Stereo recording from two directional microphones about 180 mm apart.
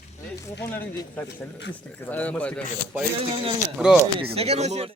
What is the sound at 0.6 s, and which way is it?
Speech, 15° left (ahead or behind).